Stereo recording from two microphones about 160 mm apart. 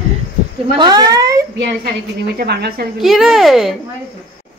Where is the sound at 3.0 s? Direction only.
Centre (ahead or behind).